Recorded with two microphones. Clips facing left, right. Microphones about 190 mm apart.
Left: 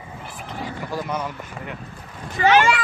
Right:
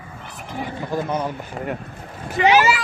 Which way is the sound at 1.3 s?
45° right (ahead or behind).